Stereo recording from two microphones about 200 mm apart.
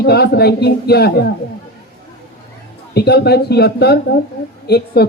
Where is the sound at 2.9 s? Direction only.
55° left (ahead or behind).